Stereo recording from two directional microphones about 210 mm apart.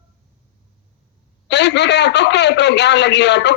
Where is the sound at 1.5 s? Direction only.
55° left (ahead or behind).